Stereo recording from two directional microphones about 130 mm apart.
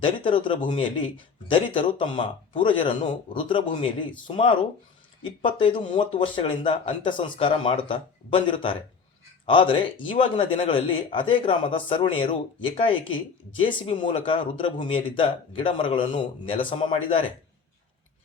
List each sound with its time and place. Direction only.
0.0 s a man's voice: 40° left (ahead or behind)